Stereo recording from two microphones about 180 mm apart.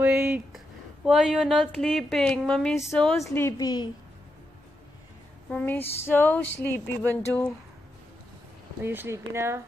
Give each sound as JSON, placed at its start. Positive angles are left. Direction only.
{"t": 0.0, "sound": "speech", "side_deg": -10}
{"t": 1.0, "sound": "a woman's voice", "side_deg": 0}
{"t": 5.5, "sound": "speech", "side_deg": 10}
{"t": 8.8, "sound": "speech", "side_deg": -10}